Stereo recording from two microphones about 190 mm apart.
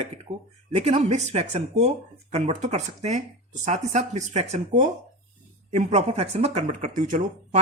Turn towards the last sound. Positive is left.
turn(degrees=-40)  # may be behind; listen again after turning